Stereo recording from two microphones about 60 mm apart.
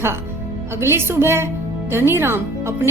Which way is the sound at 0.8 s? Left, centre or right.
Right.